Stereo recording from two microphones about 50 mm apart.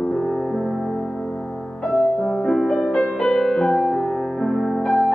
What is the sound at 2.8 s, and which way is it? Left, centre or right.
Music, centre.